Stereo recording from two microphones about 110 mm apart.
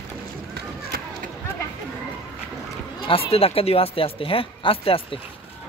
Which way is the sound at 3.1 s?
60° left (ahead or behind).